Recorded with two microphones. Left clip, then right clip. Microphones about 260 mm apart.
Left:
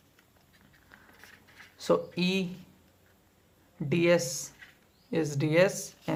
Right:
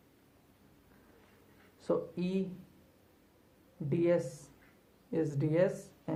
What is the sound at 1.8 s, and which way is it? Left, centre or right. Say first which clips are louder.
Speech: left 7 dB; left.